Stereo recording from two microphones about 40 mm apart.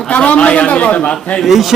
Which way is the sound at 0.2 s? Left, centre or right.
Left.